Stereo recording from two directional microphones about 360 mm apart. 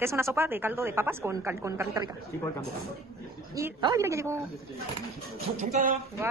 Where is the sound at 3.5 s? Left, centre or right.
Centre.